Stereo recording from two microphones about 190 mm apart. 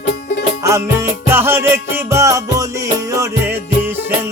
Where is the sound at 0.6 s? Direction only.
15° right (ahead or behind).